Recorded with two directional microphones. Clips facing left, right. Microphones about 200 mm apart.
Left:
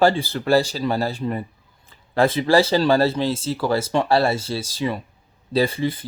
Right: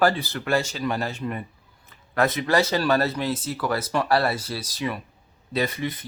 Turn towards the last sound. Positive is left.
turn(degrees=30)  # may be behind; listen again after turning